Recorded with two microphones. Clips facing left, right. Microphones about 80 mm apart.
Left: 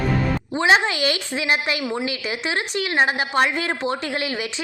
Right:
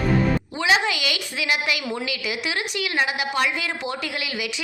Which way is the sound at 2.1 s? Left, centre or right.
Left.